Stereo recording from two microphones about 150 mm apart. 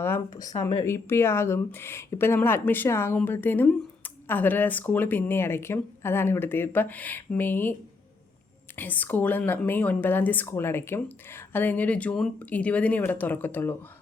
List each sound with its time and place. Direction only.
0.0 s speech: 15° left (ahead or behind)